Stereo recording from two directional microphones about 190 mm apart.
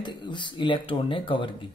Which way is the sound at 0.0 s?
25° left (ahead or behind).